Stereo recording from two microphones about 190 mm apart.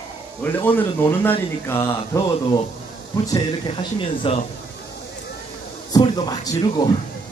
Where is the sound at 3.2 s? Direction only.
20° left (ahead or behind).